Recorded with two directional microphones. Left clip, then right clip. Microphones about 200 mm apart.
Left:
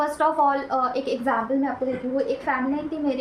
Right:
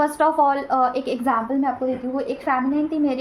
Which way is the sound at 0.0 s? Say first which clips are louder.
Right 3 dB; 40° right (ahead or behind).